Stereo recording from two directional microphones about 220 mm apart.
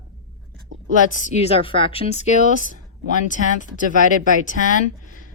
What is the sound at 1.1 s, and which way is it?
A woman's voice, 25° left (ahead or behind).